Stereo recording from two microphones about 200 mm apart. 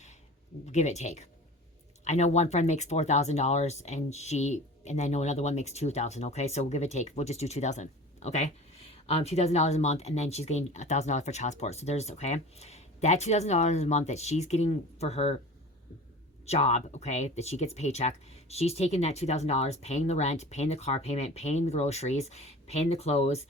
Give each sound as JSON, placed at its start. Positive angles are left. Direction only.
{"t": 0.6, "sound": "speech", "side_deg": 35}
{"t": 16.5, "sound": "speech", "side_deg": 35}